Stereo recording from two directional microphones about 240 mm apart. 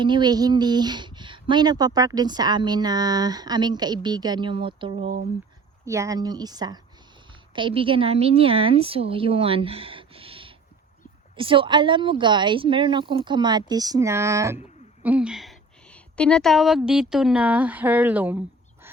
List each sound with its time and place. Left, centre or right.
0.0 s speech: centre
5.8 s a woman's voice: centre